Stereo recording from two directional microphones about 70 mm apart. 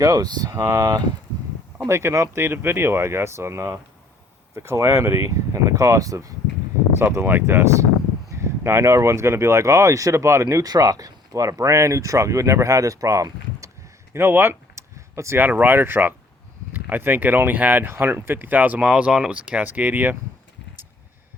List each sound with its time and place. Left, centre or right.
0.0 s speech: right
1.9 s speech: right
7.0 s speech: right
10.4 s speech: right
14.1 s speech: right